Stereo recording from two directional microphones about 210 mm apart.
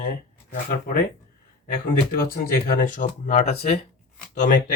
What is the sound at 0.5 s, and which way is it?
Speech, 40° left (ahead or behind).